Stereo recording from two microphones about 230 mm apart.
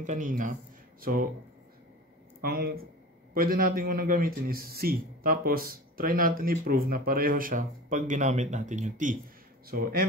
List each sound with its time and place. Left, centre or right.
0.0 s a man's voice: right
2.4 s a man's voice: right